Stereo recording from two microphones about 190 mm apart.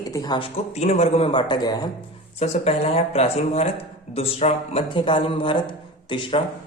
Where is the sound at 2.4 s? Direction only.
35° left (ahead or behind).